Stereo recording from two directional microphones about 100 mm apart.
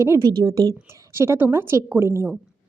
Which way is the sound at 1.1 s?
25° right (ahead or behind).